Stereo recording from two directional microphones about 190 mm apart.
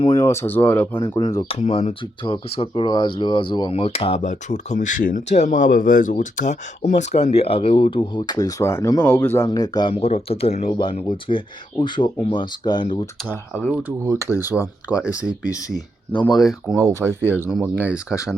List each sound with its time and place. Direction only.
0.0 s speech: 15° left (ahead or behind)
1.5 s speech: 35° left (ahead or behind)
13.6 s speech: 5° right (ahead or behind)
16.3 s speech: centre (ahead or behind)
16.7 s speech: 15° right (ahead or behind)